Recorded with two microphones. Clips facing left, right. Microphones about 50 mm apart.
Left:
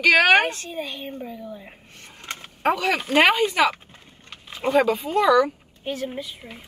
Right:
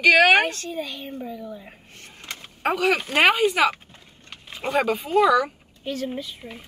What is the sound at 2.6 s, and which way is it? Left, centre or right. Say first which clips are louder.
Speech: even; centre.